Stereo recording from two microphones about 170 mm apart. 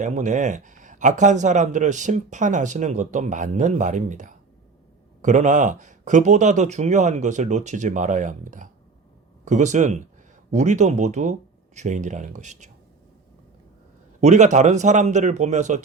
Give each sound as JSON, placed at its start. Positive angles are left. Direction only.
{"t": 0.0, "sound": "speech", "side_deg": -45}
{"t": 14.2, "sound": "speech", "side_deg": -40}